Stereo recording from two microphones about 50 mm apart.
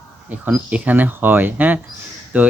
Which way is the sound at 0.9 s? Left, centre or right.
Right.